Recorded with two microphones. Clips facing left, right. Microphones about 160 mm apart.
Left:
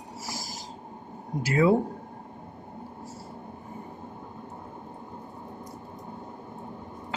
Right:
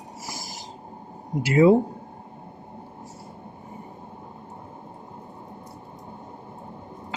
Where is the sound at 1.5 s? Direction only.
20° right (ahead or behind).